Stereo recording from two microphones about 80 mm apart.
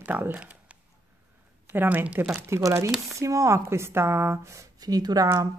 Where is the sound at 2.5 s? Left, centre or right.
Right.